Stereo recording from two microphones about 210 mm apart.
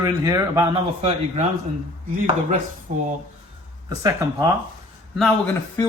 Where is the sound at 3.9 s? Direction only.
15° right (ahead or behind).